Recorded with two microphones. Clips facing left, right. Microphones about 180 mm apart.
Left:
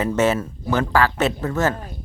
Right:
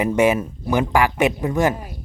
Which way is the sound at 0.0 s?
15° right (ahead or behind).